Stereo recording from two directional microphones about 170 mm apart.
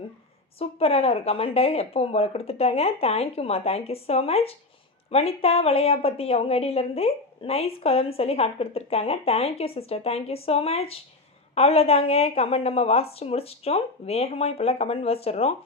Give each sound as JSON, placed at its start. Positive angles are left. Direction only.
{"t": 0.6, "sound": "speech", "side_deg": 35}